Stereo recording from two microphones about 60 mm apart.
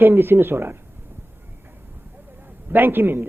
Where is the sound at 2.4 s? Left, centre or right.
Right.